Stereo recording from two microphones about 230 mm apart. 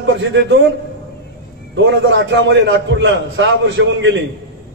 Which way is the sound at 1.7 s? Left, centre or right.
Right.